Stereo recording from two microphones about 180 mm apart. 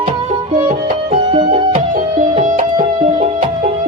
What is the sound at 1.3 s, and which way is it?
Music, 30° right (ahead or behind).